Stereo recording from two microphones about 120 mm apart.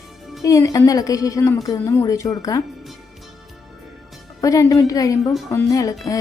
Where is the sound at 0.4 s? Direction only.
25° left (ahead or behind).